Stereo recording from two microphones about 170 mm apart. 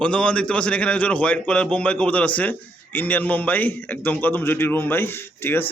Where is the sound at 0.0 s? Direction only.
5° left (ahead or behind).